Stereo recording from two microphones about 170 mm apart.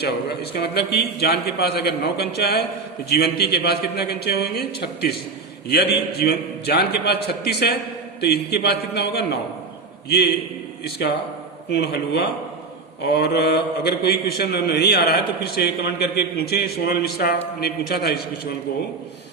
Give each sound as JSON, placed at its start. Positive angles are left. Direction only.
{"t": 0.0, "sound": "a man's voice", "side_deg": 70}